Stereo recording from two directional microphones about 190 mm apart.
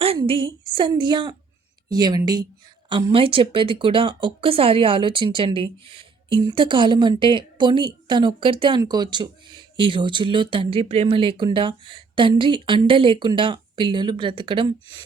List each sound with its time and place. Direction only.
0.0 s a woman's voice: 30° right (ahead or behind)